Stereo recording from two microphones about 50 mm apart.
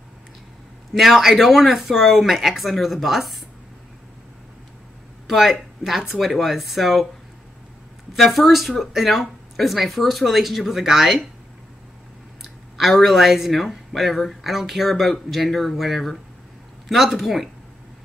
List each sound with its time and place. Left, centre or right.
0.9 s speech: centre
5.2 s speech: centre
8.1 s speech: centre
12.7 s speech: centre